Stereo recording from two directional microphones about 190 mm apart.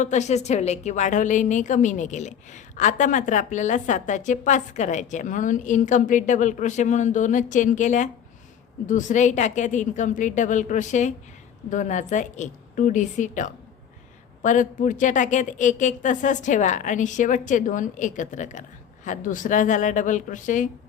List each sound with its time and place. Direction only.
0.0 s a woman's voice: 40° left (ahead or behind)